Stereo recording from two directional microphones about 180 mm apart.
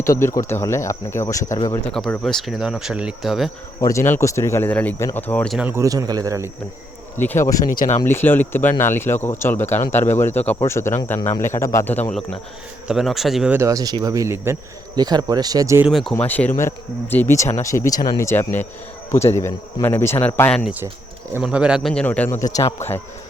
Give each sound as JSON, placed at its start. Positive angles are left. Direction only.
{"t": 0.0, "sound": "speech", "side_deg": 15}
{"t": 1.9, "sound": "speech", "side_deg": 5}
{"t": 3.8, "sound": "speech", "side_deg": 15}
{"t": 5.5, "sound": "speech", "side_deg": -10}
{"t": 7.2, "sound": "speech", "side_deg": 15}
{"t": 7.6, "sound": "speech", "side_deg": 50}
{"t": 8.0, "sound": "speech", "side_deg": 10}
{"t": 12.9, "sound": "speech", "side_deg": 0}
{"t": 15.9, "sound": "speech", "side_deg": 0}
{"t": 16.1, "sound": "speech", "side_deg": 10}
{"t": 21.3, "sound": "speech", "side_deg": -5}